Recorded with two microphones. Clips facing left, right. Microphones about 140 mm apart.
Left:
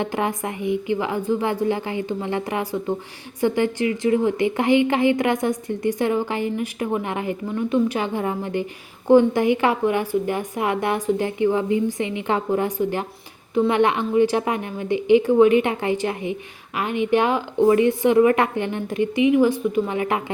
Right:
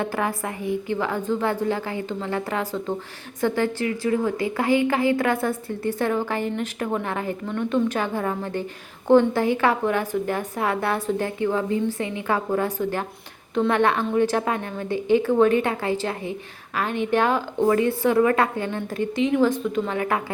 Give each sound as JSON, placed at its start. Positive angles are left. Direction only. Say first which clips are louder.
{"t": 0.0, "sound": "a woman's voice", "louder": "left 2 dB", "side_deg": 20}